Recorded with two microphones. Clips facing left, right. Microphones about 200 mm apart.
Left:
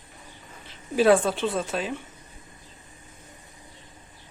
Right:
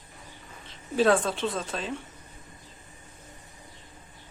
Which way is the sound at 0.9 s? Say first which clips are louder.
Left 3 dB; 5° left (ahead or behind).